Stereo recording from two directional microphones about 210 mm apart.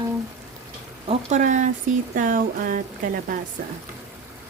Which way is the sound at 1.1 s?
35° right (ahead or behind).